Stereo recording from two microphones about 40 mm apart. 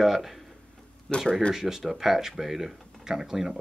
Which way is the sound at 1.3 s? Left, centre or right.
Left.